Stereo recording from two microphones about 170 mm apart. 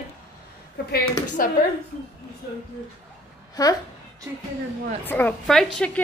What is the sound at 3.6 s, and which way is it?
Speech, 20° left (ahead or behind).